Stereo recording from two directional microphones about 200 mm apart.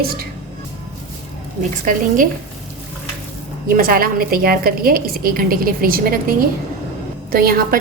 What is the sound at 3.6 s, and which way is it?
A woman's voice, 45° right (ahead or behind).